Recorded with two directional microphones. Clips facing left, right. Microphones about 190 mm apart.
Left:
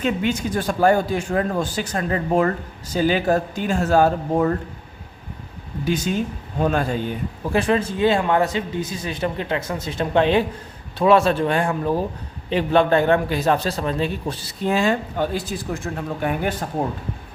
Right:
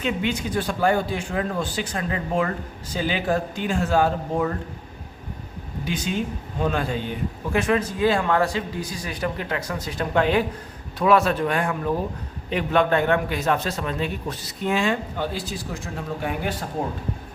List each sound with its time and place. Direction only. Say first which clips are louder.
0.0 s speech: left 3 dB; 45° left (ahead or behind)
5.8 s speech: left 4 dB; 40° left (ahead or behind)
7.5 s a man's voice: left 2 dB; 30° left (ahead or behind); by 15.8 s 55° left (ahead or behind)